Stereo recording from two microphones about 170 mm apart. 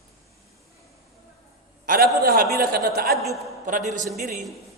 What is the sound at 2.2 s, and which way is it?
Speech, 60° right (ahead or behind).